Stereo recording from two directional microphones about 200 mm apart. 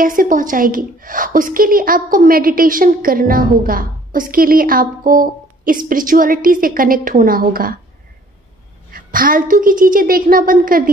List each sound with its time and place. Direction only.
0.0 s a woman's voice: 45° right (ahead or behind)
8.9 s a woman's voice: 45° right (ahead or behind)